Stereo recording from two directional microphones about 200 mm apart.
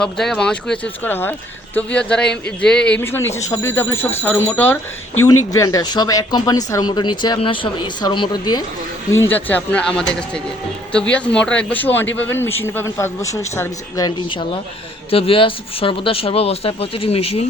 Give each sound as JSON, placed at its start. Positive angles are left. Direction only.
{"t": 0.0, "sound": "a man's voice", "side_deg": 5}
{"t": 9.2, "sound": "a man's voice", "side_deg": 10}